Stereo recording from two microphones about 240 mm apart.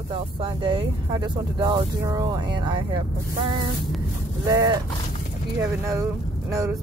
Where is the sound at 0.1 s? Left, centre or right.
Right.